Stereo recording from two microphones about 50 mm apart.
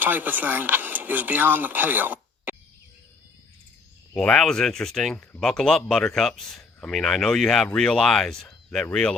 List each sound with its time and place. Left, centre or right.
0.0 s speech: right
4.1 s speech: left
4.4 s speech: centre